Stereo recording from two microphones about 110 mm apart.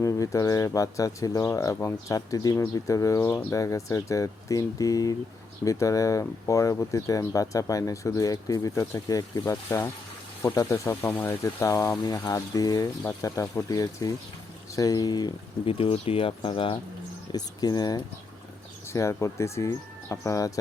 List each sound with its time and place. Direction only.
0.0 s speech: 30° left (ahead or behind)
15.6 s speech: 55° left (ahead or behind)
17.3 s speech: 35° left (ahead or behind)
18.9 s speech: 25° left (ahead or behind)